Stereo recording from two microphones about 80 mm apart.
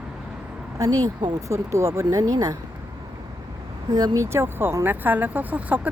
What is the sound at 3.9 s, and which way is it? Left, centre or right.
Speech, right.